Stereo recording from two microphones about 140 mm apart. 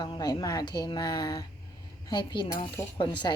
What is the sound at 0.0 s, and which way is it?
A woman's voice, 30° left (ahead or behind).